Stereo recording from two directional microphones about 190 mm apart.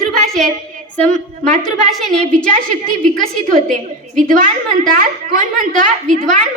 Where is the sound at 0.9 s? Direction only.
5° left (ahead or behind).